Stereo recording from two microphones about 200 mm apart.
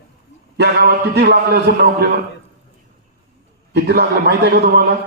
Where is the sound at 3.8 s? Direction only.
55° right (ahead or behind).